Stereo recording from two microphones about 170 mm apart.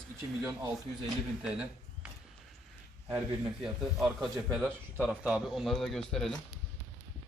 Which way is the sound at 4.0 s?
Centre (ahead or behind).